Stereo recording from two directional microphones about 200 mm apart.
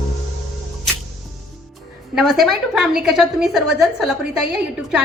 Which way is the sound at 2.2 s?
Centre (ahead or behind).